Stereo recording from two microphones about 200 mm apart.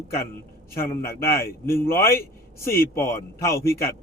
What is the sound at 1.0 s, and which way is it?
A man's voice, 15° left (ahead or behind).